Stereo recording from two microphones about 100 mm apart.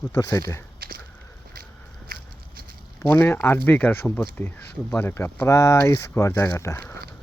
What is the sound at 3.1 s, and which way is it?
Speech, 20° left (ahead or behind).